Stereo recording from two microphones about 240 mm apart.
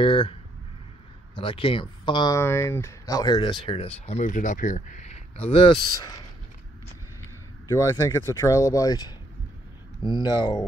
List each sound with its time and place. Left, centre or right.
0.0 s speech: left
1.4 s speech: left
7.6 s speech: centre
10.2 s speech: centre